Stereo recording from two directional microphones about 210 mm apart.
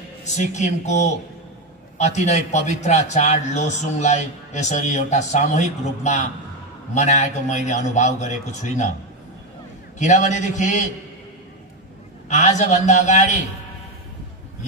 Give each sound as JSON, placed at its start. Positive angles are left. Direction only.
{"t": 0.2, "sound": "a man's voice", "side_deg": 35}
{"t": 2.1, "sound": "a man's voice", "side_deg": 35}
{"t": 9.9, "sound": "a man's voice", "side_deg": 35}
{"t": 12.3, "sound": "a man's voice", "side_deg": 35}